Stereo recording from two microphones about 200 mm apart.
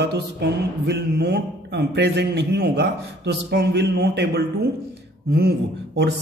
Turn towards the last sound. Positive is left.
turn(degrees=-55)  # may be behind; listen again after turning